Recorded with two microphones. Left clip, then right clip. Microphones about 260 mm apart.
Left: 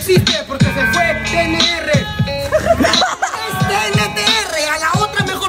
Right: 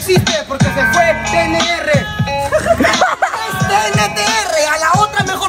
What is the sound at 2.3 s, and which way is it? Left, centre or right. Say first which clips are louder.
Music: right 1 dB; right.